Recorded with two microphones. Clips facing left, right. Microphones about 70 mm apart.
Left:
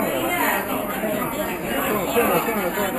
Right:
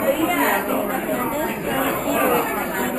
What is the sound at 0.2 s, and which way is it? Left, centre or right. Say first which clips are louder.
Chatter: right 3 dB; centre.